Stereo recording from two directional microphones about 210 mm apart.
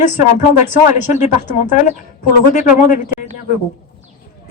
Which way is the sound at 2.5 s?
40° left (ahead or behind).